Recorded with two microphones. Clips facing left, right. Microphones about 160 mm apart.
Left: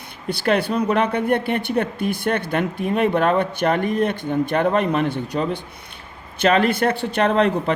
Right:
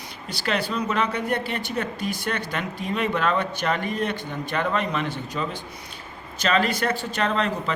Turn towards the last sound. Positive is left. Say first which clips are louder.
# left 7 dB
turn(degrees=60)  # may be behind; listen again after turning